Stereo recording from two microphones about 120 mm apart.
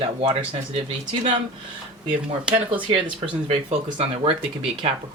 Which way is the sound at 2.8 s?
45° right (ahead or behind).